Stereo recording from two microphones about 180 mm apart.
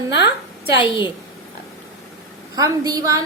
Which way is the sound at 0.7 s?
25° left (ahead or behind).